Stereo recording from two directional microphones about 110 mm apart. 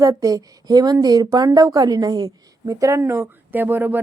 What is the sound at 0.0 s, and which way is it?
Speech, 30° right (ahead or behind).